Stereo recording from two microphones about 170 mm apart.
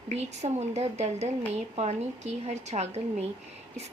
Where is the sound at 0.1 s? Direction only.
40° right (ahead or behind).